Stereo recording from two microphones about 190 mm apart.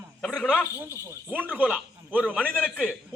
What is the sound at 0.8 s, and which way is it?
A man's voice, 10° right (ahead or behind).